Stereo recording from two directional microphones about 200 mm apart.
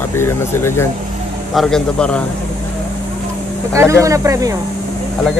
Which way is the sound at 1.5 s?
Centre (ahead or behind).